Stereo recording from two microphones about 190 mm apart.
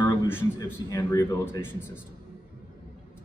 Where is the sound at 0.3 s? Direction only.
15° left (ahead or behind).